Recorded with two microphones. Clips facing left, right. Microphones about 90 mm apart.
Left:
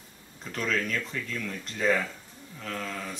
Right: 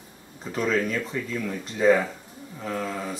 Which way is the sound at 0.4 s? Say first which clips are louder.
Right 5 dB; 10° right (ahead or behind).